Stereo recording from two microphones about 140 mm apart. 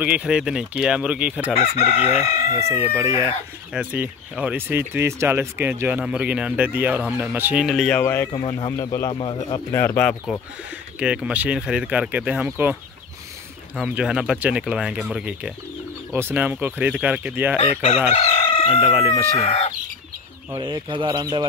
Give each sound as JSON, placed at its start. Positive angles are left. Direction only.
{"t": 0.0, "sound": "speech", "side_deg": -10}
{"t": 1.6, "sound": "chicken", "side_deg": 50}
{"t": 2.5, "sound": "speech", "side_deg": -15}
{"t": 7.9, "sound": "speech", "side_deg": 15}
{"t": 8.3, "sound": "speech", "side_deg": 35}
{"t": 9.1, "sound": "speech", "side_deg": 40}
{"t": 9.7, "sound": "speech", "side_deg": 15}
{"t": 11.0, "sound": "speech", "side_deg": -5}
{"t": 13.8, "sound": "speech", "side_deg": -5}
{"t": 17.8, "sound": "chicken", "side_deg": 50}
{"t": 20.6, "sound": "speech", "side_deg": -35}